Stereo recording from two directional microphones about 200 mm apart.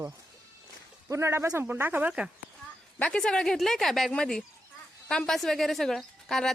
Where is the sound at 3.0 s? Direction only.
5° left (ahead or behind).